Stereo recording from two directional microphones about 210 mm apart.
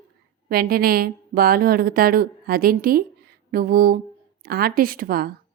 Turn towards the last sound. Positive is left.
turn(degrees=-45)  # may be behind; listen again after turning